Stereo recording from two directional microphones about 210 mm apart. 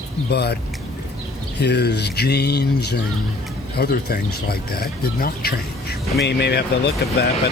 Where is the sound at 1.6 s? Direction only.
50° left (ahead or behind).